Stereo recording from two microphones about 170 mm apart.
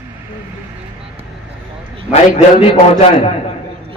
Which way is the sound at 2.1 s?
45° left (ahead or behind).